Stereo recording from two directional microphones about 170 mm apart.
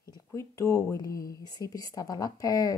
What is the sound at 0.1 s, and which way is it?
A woman's voice, 15° left (ahead or behind).